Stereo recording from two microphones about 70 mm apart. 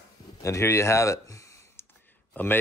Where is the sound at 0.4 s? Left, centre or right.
Left.